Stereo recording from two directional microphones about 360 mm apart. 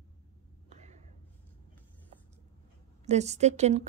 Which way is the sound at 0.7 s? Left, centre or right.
Centre.